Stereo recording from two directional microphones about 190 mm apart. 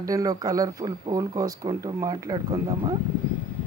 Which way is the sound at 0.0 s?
20° right (ahead or behind).